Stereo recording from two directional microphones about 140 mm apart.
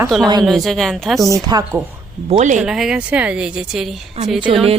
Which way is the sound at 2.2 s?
60° right (ahead or behind).